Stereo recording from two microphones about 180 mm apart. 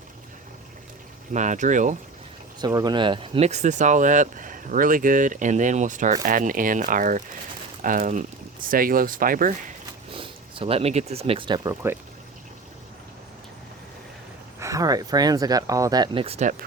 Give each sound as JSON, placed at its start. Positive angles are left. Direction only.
{"t": 1.3, "sound": "speech", "side_deg": -40}
{"t": 2.6, "sound": "speech", "side_deg": -20}
{"t": 10.2, "sound": "speech", "side_deg": -30}
{"t": 14.6, "sound": "speech", "side_deg": -20}